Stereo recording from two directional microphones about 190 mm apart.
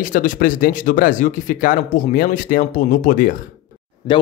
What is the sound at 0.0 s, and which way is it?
Speech, 45° left (ahead or behind).